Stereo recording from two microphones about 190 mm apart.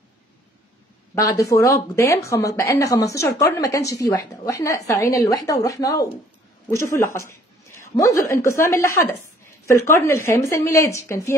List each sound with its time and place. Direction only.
1.1 s a woman's voice: 15° left (ahead or behind)